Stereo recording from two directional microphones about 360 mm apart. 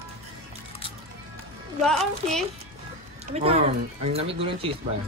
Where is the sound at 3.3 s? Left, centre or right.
Centre.